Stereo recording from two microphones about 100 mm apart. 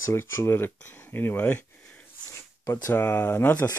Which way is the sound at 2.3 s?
30° left (ahead or behind).